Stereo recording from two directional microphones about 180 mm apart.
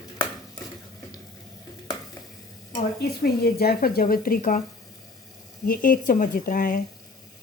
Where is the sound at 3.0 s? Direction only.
60° left (ahead or behind).